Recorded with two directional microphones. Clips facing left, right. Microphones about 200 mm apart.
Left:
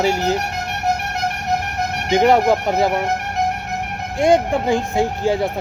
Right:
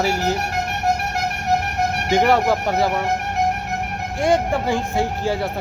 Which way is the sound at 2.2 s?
20° left (ahead or behind).